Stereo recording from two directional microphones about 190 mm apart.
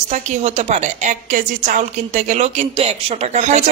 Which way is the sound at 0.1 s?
35° right (ahead or behind).